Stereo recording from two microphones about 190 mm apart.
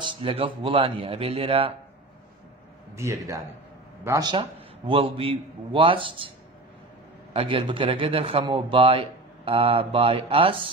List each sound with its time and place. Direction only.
0.0 s a man's voice: 25° right (ahead or behind)
3.0 s a man's voice: 15° right (ahead or behind)
7.3 s a man's voice: 25° right (ahead or behind)